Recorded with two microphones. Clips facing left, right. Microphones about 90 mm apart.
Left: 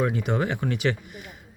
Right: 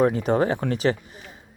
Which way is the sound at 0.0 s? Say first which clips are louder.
Right 5 dB; 35° right (ahead or behind).